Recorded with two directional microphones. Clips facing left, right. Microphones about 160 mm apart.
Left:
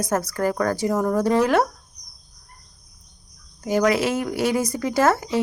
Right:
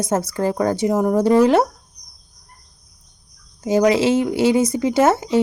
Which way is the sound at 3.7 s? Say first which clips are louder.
Right 4 dB; 25° right (ahead or behind).